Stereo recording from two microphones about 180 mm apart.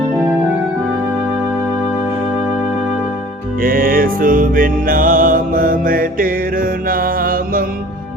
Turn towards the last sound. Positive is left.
turn(degrees=-50)  # may be behind; listen again after turning